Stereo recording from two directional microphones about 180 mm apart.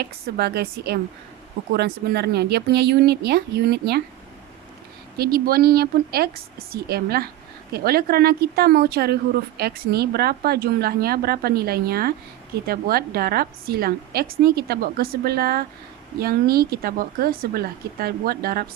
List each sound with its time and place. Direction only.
0.0 s a woman's voice: 65° right (ahead or behind)
5.1 s a woman's voice: 55° right (ahead or behind)